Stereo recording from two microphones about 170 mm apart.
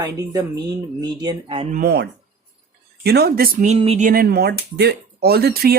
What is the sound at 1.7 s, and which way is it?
Speech, 65° right (ahead or behind).